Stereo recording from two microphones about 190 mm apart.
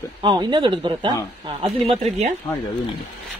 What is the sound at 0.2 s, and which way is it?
A woman's voice, 25° right (ahead or behind).